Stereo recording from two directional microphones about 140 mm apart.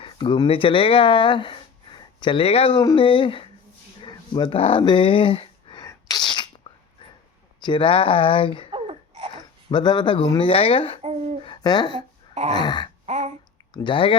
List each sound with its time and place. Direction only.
0.0 s speech: 35° left (ahead or behind)
4.0 s a sound: 35° left (ahead or behind)
5.9 s sneeze: 30° left (ahead or behind)
7.6 s speech: 35° left (ahead or behind)
8.7 s babbling: 45° right (ahead or behind)
9.3 s speech: 35° left (ahead or behind)
12.3 s speech: 50° right (ahead or behind)
12.5 s speech: 30° left (ahead or behind)
13.1 s a sound: 50° right (ahead or behind)
13.7 s speech: 35° left (ahead or behind)